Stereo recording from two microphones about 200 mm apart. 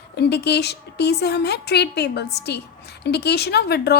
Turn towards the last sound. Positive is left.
turn(degrees=55)  # may be behind; listen again after turning